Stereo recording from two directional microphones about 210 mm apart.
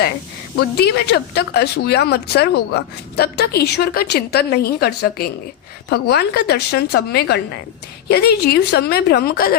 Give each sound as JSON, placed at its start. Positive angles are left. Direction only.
{"t": 0.6, "sound": "a woman's voice", "side_deg": 50}